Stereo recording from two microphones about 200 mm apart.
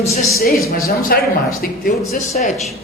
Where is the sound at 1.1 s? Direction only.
50° left (ahead or behind).